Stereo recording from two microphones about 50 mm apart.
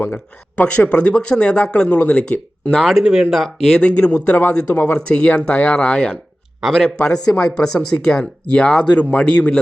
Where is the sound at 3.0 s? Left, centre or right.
Centre.